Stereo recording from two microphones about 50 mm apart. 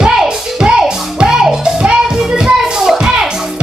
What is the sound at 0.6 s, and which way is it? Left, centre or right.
Music, centre.